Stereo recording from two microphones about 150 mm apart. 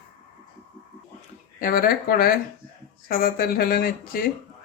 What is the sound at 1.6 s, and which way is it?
Speech, 75° left (ahead or behind).